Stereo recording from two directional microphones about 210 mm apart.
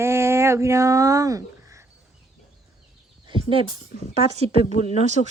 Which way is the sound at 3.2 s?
25° right (ahead or behind).